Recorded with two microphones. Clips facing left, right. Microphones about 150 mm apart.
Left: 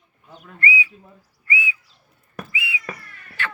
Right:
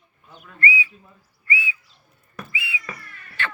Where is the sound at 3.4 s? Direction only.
10° left (ahead or behind).